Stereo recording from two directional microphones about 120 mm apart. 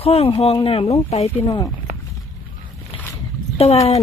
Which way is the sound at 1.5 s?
35° left (ahead or behind).